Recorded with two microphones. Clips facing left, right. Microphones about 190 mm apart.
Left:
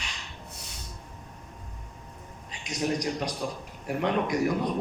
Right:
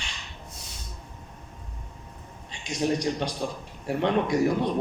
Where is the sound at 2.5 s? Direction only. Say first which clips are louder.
Right 3 dB; 30° right (ahead or behind).